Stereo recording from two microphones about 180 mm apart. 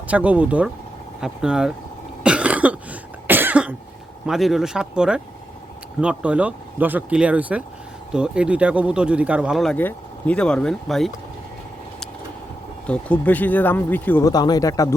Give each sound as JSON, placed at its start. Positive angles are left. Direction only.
{"t": 0.1, "sound": "speech", "side_deg": -10}
{"t": 2.2, "sound": "cough", "side_deg": -5}
{"t": 4.3, "sound": "speech", "side_deg": 0}
{"t": 12.9, "sound": "speech", "side_deg": 10}
{"t": 14.3, "sound": "speech", "side_deg": 20}